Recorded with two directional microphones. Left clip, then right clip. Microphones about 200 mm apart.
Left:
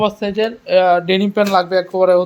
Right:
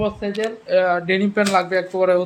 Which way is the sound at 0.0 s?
45° left (ahead or behind).